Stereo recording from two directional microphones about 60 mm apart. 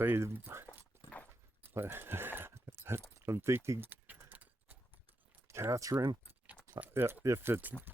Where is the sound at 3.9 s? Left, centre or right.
Right.